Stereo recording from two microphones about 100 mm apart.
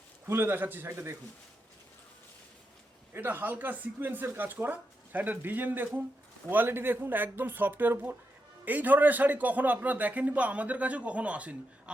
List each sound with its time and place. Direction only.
0.3 s speech: 25° right (ahead or behind)
3.1 s a man's voice: 20° right (ahead or behind)